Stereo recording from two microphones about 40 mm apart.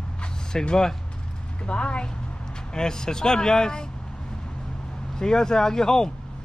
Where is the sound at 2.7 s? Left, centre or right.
Centre.